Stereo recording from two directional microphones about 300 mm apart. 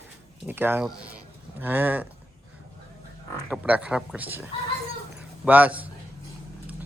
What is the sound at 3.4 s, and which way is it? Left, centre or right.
Speech, centre.